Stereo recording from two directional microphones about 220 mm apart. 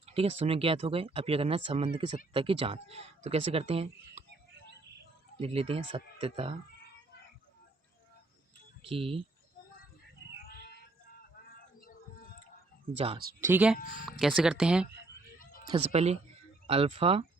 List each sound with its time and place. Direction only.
0.0 s speech: 25° right (ahead or behind)
5.4 s speech: 25° right (ahead or behind)
8.8 s speech: 25° right (ahead or behind)
10.4 s a sound: 45° left (ahead or behind)
13.4 s speech: 10° right (ahead or behind)
15.6 s speech: 25° right (ahead or behind)